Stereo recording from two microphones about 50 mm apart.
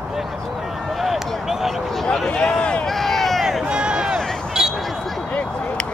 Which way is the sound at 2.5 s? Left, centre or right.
Left.